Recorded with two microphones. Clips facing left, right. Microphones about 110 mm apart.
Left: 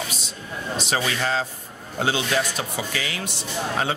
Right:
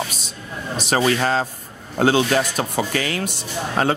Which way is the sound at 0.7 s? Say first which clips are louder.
Right 7 dB; 45° right (ahead or behind).